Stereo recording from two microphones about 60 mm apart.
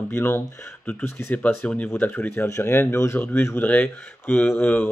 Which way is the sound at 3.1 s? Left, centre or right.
Left.